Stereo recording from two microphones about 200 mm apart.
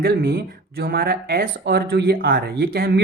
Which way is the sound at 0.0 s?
50° right (ahead or behind).